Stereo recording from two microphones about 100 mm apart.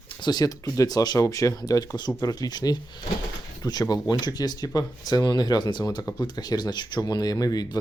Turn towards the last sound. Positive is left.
turn(degrees=40)  # may be behind; listen again after turning